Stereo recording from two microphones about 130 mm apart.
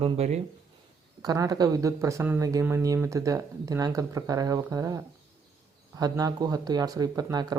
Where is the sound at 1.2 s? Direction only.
30° right (ahead or behind).